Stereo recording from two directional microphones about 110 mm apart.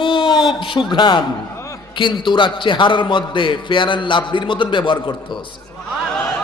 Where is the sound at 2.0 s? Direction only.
45° left (ahead or behind).